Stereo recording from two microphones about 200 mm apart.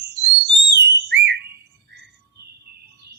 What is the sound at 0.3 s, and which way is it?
Whistle, 65° right (ahead or behind).